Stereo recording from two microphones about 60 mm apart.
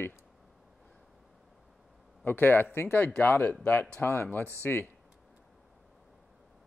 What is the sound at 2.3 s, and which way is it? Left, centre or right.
Speech, left.